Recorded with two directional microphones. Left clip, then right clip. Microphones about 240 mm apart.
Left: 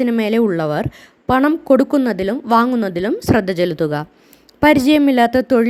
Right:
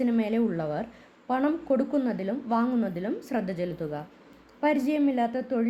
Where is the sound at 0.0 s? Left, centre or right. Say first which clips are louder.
Left 11 dB; left.